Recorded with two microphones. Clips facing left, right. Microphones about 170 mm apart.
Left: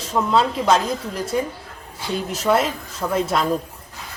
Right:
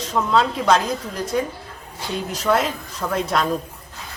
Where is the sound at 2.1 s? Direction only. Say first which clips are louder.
Left 1 dB; 5° left (ahead or behind).